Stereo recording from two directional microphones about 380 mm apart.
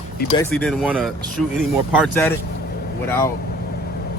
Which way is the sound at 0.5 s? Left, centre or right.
Centre.